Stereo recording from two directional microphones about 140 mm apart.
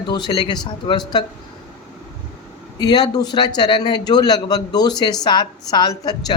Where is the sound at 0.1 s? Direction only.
35° left (ahead or behind).